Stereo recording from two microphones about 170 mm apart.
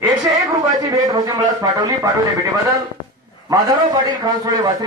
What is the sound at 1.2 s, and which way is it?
Speech, 20° right (ahead or behind).